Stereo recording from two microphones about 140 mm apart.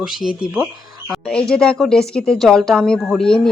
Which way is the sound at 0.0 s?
5° right (ahead or behind).